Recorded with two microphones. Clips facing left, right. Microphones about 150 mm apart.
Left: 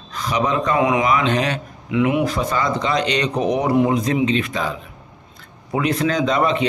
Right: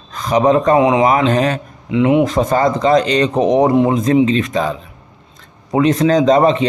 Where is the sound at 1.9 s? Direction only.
25° right (ahead or behind).